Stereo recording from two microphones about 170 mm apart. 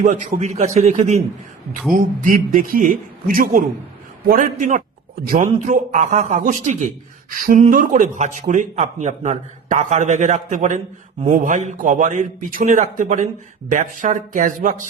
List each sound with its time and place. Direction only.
0.0 s a man's voice: 45° right (ahead or behind)
1.9 s a man's voice: 55° right (ahead or behind)